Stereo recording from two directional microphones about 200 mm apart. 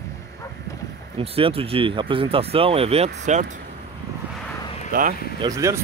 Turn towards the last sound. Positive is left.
turn(degrees=-15)  # may be behind; listen again after turning